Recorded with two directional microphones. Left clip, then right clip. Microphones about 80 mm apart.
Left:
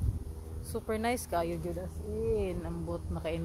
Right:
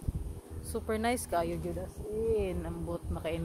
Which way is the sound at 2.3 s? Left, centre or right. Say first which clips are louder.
Even; centre.